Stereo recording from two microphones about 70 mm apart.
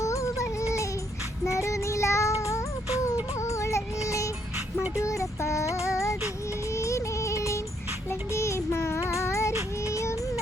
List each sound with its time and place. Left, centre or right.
0.0 s music: left
1.5 s child singing: left
3.4 s music: left
4.9 s child singing: left
6.7 s music: left
8.3 s child singing: left
9.9 s music: left